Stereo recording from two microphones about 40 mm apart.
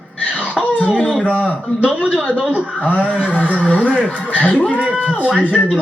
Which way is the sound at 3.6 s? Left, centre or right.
Left.